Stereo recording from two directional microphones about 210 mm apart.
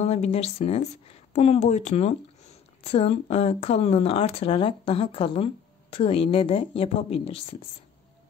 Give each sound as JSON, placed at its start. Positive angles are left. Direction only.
{"t": 0.0, "sound": "speech", "side_deg": 30}